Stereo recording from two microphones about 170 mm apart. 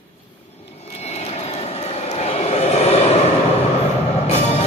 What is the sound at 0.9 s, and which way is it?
Vehicle, 40° left (ahead or behind).